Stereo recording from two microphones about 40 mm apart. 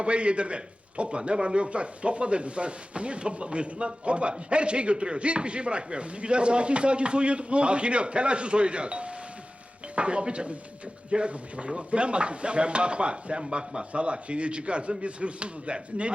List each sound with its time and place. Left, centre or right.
0.0 s speech: right